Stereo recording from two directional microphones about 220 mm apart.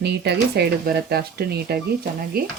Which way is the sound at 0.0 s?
50° right (ahead or behind).